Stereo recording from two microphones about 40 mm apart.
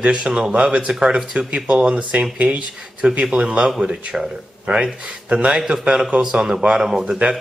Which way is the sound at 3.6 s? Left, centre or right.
Centre.